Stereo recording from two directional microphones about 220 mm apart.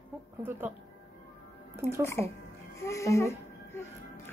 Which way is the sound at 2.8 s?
15° left (ahead or behind).